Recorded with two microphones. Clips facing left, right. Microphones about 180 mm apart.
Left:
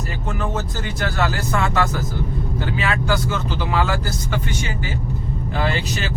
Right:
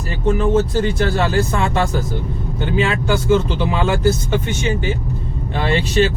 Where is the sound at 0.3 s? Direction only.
30° right (ahead or behind).